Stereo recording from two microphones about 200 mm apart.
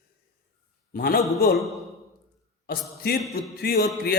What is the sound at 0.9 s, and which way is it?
Mantra, 50° left (ahead or behind).